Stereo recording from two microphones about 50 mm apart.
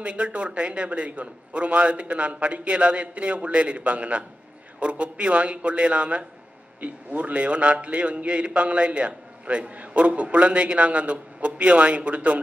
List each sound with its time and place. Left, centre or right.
0.0 s a man's voice: right